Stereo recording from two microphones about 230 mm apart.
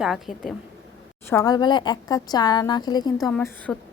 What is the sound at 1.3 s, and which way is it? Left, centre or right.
A woman's voice, centre.